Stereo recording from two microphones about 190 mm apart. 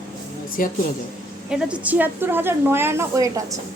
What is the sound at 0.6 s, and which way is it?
Speech, 50° left (ahead or behind).